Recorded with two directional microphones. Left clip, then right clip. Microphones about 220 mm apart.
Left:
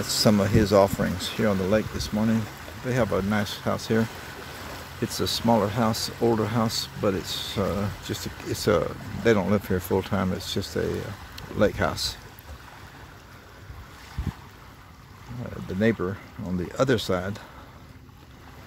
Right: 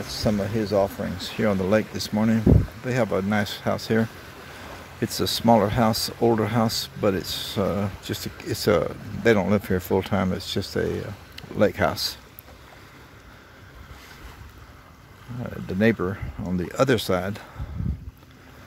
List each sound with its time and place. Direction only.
0.0 s speech: 10° left (ahead or behind); by 4.0 s 10° right (ahead or behind)
5.0 s speech: 15° right (ahead or behind)
15.8 s speech: 15° right (ahead or behind)